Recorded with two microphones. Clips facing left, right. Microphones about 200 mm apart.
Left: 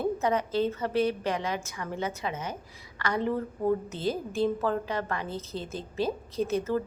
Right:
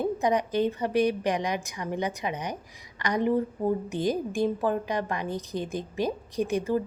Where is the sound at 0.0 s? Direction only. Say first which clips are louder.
Right 2 dB; 15° right (ahead or behind).